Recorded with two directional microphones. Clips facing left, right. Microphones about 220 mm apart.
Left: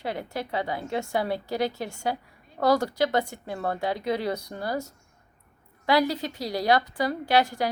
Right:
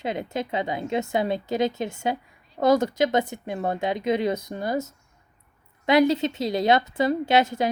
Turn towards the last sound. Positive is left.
turn(degrees=-20)  # may be behind; listen again after turning